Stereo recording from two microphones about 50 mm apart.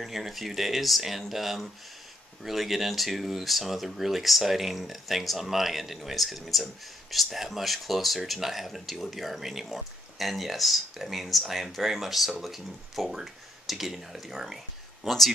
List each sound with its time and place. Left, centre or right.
0.0 s speech: centre